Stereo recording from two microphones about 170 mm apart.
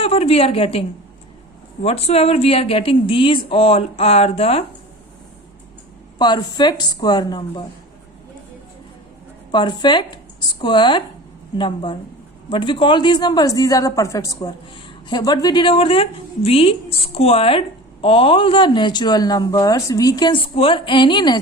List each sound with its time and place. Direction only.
0.0 s speech: 35° left (ahead or behind)
6.1 s speech: 25° left (ahead or behind)
9.5 s speech: 25° left (ahead or behind)